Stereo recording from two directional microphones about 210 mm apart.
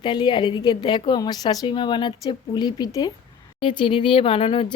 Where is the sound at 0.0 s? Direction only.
20° left (ahead or behind).